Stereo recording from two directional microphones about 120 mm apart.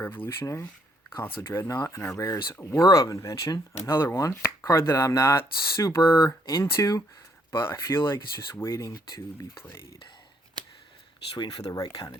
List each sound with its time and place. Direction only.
0.0 s speech: 15° left (ahead or behind)
1.4 s chopping: 20° left (ahead or behind)
11.6 s speech: 30° left (ahead or behind)